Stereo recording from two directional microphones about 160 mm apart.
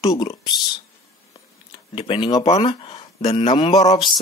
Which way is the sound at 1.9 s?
35° left (ahead or behind).